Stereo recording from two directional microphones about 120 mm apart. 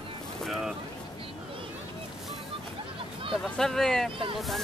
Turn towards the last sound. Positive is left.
turn(degrees=5)  # may be behind; listen again after turning